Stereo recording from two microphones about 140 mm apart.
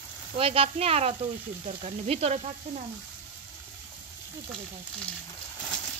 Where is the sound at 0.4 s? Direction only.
45° right (ahead or behind).